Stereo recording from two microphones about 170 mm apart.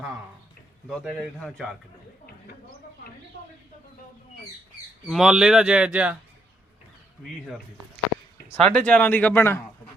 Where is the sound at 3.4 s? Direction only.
75° right (ahead or behind).